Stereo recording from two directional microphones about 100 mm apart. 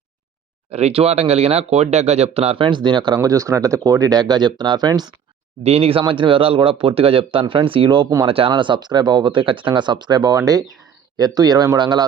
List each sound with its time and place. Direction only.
0.7 s speech: 90° right; by 3.2 s 50° right (ahead or behind)
3.2 s speech: 30° right (ahead or behind)
5.6 s speech: 85° right; by 12.0 s 45° right (ahead or behind)